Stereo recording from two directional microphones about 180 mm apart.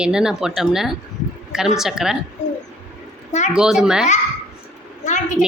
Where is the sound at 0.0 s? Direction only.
5° right (ahead or behind).